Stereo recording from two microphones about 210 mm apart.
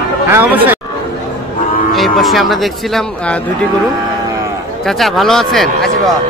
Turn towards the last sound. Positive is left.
turn(degrees=0)  # may be behind; listen again after turning